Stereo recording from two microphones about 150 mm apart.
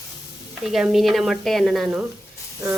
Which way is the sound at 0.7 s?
Centre (ahead or behind).